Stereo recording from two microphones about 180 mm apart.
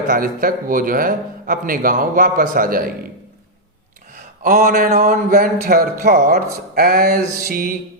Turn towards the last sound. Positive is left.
turn(degrees=-50)  # may be behind; listen again after turning